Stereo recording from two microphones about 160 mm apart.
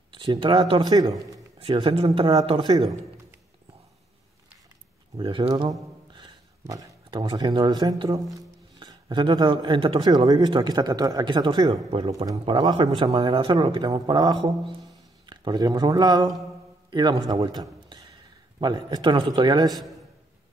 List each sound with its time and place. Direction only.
0.1 s speech: 30° right (ahead or behind)
1.6 s a man's voice: 35° right (ahead or behind)
5.1 s speech: 30° right (ahead or behind)
17.5 s a sound: 25° right (ahead or behind)
18.6 s speech: 25° right (ahead or behind)